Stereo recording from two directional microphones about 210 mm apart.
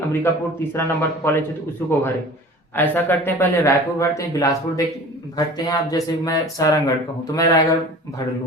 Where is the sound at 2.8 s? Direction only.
10° left (ahead or behind).